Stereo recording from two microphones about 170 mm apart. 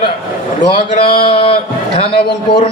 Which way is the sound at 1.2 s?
30° left (ahead or behind).